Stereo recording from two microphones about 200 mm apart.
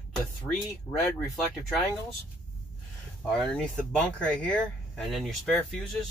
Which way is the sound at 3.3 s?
5° left (ahead or behind).